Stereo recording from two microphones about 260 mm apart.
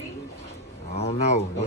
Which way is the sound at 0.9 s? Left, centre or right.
Left.